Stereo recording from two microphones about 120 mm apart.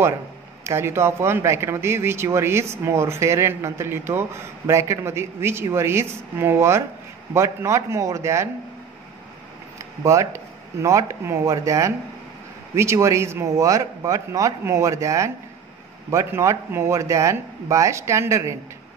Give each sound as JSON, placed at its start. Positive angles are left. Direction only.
{"t": 0.7, "sound": "speech", "side_deg": -20}
{"t": 9.8, "sound": "speech", "side_deg": -25}